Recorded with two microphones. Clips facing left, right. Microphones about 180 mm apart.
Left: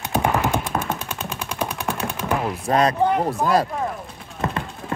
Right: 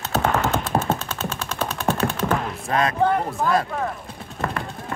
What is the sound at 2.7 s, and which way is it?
Speech, 35° left (ahead or behind).